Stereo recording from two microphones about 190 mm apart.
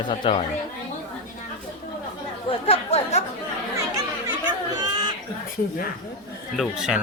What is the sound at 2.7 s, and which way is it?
Chatter, 35° left (ahead or behind).